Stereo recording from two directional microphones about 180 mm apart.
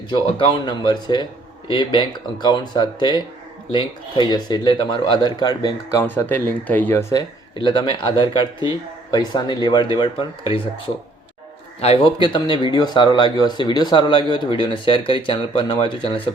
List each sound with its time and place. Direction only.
0.1 s speech: 30° left (ahead or behind)